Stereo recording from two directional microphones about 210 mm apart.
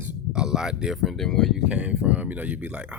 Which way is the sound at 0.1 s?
5° right (ahead or behind).